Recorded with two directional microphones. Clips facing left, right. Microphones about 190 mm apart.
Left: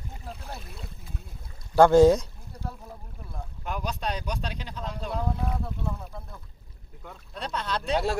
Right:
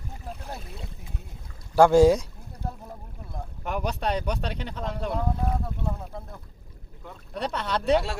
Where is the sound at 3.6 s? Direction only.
60° right (ahead or behind).